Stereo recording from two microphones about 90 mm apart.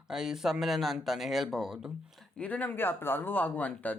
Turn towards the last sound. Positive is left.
turn(degrees=15)  # may be behind; listen again after turning